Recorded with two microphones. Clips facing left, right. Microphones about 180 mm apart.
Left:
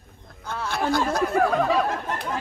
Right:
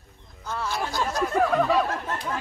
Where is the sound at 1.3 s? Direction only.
Centre (ahead or behind).